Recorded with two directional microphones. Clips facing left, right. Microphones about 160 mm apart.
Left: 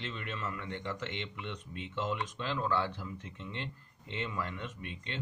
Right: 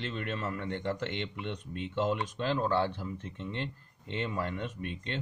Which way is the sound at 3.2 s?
45° right (ahead or behind).